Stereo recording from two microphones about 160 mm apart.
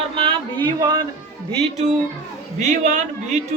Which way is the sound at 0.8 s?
25° right (ahead or behind).